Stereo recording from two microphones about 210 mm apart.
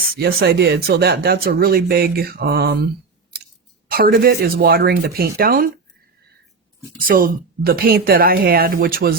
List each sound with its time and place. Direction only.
0.2 s speech: 45° right (ahead or behind)
7.1 s speech: 45° right (ahead or behind)